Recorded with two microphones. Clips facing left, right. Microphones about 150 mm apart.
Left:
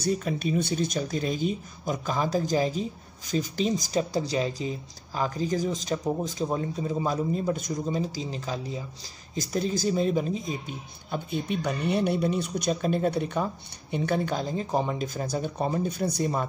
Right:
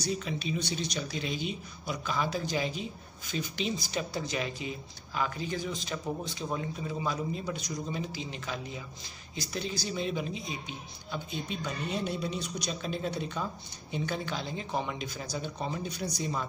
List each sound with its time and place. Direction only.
0.0 s speech: 45° left (ahead or behind)